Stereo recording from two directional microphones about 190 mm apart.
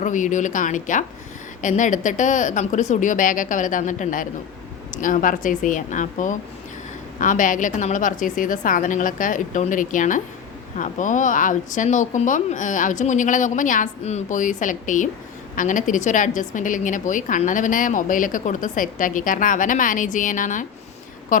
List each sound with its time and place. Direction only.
0.0 s a woman's voice: 40° left (ahead or behind)